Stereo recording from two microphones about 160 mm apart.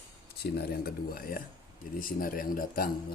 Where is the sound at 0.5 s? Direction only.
70° left (ahead or behind).